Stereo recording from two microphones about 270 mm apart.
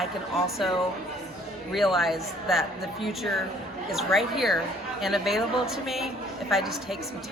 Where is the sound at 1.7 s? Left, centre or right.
Centre.